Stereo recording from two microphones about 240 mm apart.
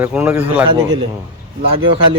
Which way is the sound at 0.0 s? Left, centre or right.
Centre.